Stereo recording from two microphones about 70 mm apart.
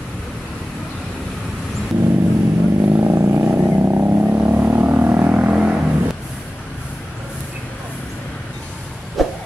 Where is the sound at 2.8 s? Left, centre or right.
Right; by 5.8 s centre.